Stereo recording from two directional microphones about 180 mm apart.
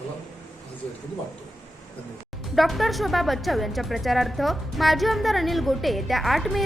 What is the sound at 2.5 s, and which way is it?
Speech, centre (ahead or behind).